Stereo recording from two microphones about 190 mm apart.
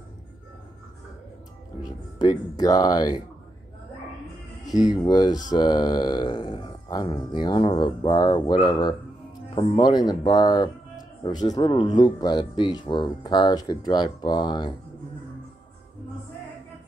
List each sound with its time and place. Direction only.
1.8 s speech: 20° left (ahead or behind)
4.6 s speech: 20° left (ahead or behind)